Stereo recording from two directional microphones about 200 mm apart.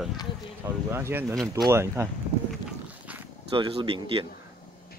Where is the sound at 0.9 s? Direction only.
10° right (ahead or behind).